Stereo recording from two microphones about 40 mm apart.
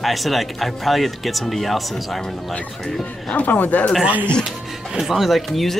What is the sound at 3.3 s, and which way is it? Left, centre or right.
Speech, left.